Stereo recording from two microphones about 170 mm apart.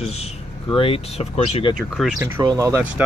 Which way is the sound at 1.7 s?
Centre (ahead or behind).